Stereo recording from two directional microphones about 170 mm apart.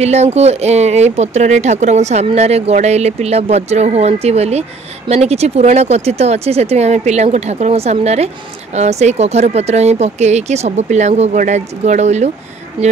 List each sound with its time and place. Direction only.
0.0 s speech: 40° right (ahead or behind)